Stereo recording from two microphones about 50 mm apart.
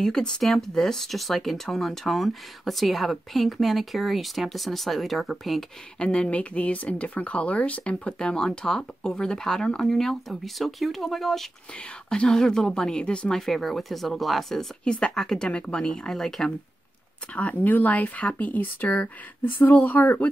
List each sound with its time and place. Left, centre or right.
0.0 s speech: centre
5.9 s speech: left; by 11.4 s centre
12.1 s speech: centre
13.4 s speech: centre
14.9 s speech: centre
17.4 s speech: left